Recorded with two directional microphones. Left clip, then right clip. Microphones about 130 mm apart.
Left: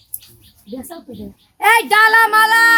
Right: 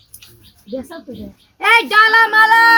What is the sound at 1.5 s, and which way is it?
A child's voice, 20° left (ahead or behind).